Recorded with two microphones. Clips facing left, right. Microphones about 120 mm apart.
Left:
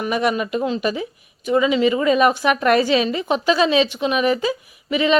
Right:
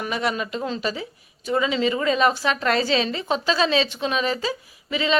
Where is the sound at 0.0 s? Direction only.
20° left (ahead or behind).